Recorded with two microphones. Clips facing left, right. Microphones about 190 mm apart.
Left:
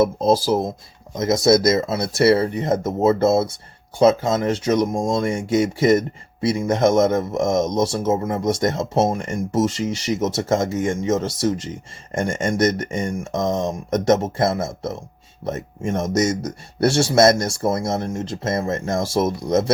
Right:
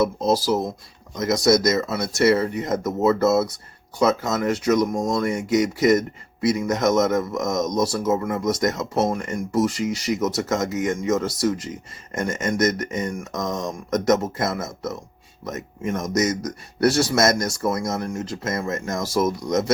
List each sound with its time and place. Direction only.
0.0 s speech: 25° left (ahead or behind)